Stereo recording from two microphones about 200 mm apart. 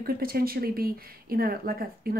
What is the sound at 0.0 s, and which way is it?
Speech, 45° right (ahead or behind).